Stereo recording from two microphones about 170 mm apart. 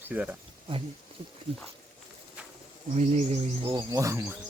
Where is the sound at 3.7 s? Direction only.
20° right (ahead or behind).